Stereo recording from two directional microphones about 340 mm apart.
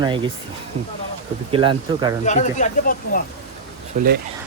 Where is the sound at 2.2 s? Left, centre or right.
Left.